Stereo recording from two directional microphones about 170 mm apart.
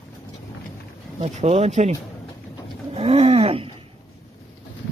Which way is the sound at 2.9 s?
35° right (ahead or behind).